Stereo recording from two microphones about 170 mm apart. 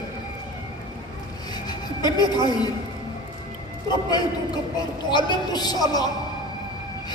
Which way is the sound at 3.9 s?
25° left (ahead or behind).